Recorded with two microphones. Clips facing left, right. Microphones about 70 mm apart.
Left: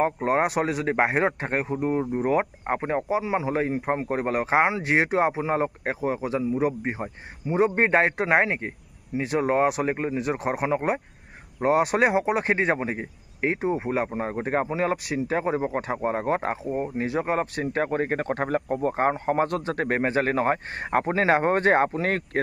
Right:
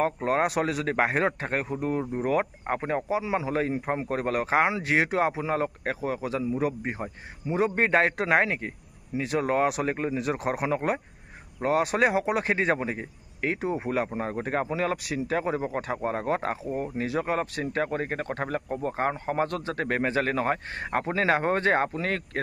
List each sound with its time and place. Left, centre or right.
0.0 s a man's voice: centre
0.4 s a man's voice: centre
3.0 s a man's voice: centre
4.5 s a man's voice: centre
5.5 s speech: left
6.3 s a man's voice: centre
7.7 s speech: left
8.0 s a man's voice: centre
9.1 s a man's voice: centre
10.1 s a man's voice: centre
11.6 s speech: left
12.0 s a man's voice: centre
12.5 s speech: centre; by 22.4 s left